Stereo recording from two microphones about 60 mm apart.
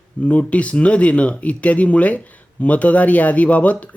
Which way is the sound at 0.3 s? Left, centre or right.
Left.